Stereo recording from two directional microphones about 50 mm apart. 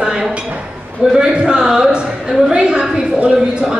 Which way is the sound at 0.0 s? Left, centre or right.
Centre.